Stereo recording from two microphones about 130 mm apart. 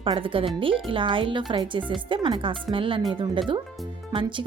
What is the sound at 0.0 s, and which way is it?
Speech, 40° right (ahead or behind).